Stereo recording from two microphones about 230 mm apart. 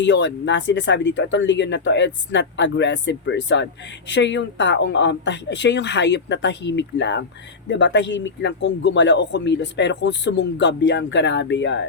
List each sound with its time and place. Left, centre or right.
0.0 s speech: left